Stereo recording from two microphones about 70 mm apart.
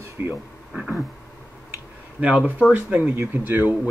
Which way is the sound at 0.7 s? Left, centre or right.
Centre.